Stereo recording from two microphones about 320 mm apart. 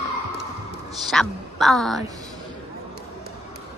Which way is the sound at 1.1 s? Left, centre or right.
Centre.